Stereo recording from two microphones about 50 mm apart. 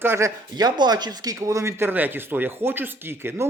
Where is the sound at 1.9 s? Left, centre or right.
Right.